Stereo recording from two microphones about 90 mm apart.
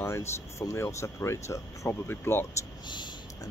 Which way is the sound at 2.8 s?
60° left (ahead or behind).